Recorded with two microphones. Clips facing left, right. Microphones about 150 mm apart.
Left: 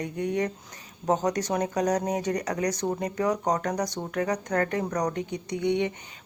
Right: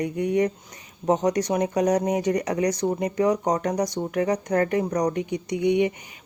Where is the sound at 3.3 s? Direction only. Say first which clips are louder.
Right 2 dB; 20° right (ahead or behind).